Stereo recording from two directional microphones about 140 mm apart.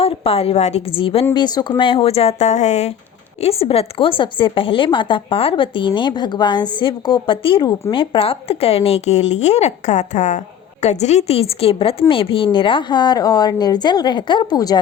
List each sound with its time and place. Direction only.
0.0 s a woman's voice: 45° left (ahead or behind); by 14.8 s 30° left (ahead or behind)